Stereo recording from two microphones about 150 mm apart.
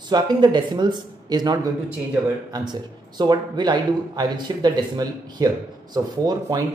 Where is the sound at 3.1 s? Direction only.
30° right (ahead or behind).